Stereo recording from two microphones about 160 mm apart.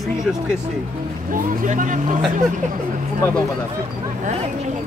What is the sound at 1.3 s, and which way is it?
Speech, 55° right (ahead or behind).